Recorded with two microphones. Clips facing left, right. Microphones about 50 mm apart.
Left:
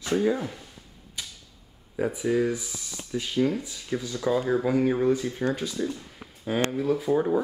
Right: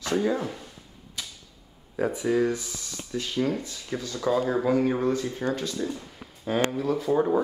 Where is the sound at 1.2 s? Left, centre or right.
Centre.